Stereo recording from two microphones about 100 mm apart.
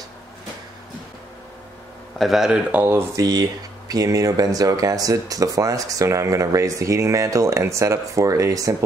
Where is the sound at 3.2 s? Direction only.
40° right (ahead or behind).